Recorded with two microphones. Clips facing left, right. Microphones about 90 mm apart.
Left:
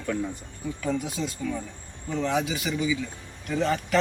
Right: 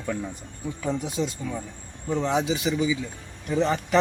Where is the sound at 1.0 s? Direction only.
20° right (ahead or behind).